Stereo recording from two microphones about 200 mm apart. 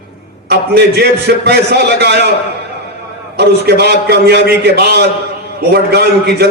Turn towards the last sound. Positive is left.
turn(degrees=-55)  # may be behind; listen again after turning